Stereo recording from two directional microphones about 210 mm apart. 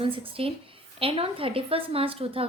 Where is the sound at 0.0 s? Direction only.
25° right (ahead or behind).